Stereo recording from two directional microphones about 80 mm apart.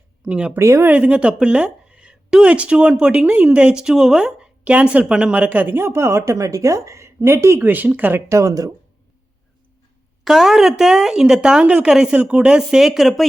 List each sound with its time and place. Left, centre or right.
0.2 s speech: centre
0.6 s a woman's voice: right
0.9 s a woman's voice: centre
5.5 s a woman's voice: right
8.3 s a woman's voice: right
10.2 s a woman's voice: centre